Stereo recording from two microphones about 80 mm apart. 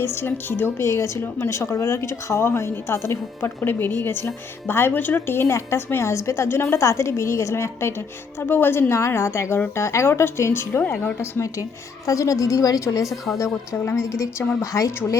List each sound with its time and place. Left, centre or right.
0.0 s a woman's voice: left
13.1 s a woman's voice: centre
14.6 s speech: left